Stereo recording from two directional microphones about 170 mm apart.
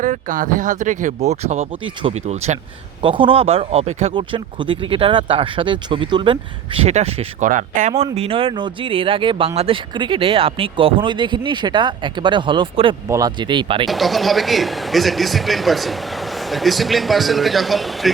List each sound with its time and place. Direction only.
0.0 s speech: 50° right (ahead or behind)
1.8 s speech: 30° right (ahead or behind)
3.0 s speech: 30° right (ahead or behind)
7.4 s speech: 50° right (ahead or behind)
8.0 s speech: 35° right (ahead or behind)
13.8 s speech: centre (ahead or behind)